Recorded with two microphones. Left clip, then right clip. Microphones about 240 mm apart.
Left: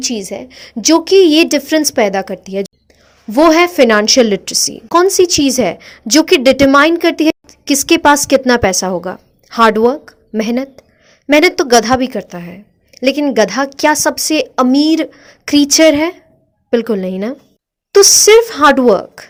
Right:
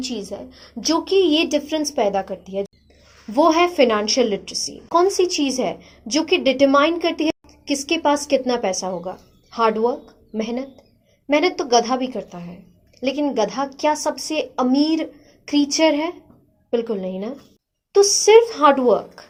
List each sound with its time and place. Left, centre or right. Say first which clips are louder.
0.0 s a woman's voice: left 8 dB; left